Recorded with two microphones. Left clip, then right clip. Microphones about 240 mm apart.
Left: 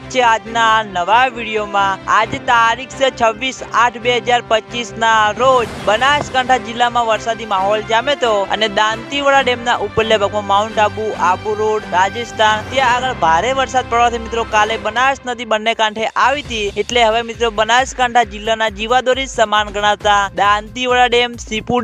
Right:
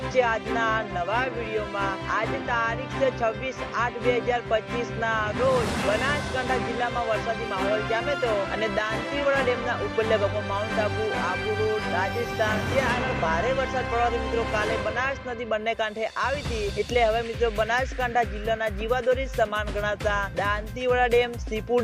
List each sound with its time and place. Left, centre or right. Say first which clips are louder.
0.1 s a man's voice: left 11 dB; left
11.9 s a man's voice: left 11 dB; left